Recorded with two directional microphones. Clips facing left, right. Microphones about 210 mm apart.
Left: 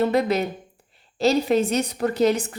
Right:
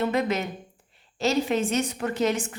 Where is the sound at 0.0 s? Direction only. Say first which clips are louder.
Left 4 dB; 35° left (ahead or behind).